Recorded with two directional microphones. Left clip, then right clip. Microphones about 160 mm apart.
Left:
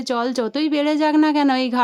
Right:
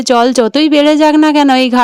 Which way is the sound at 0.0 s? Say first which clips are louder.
Right 13 dB; 45° right (ahead or behind).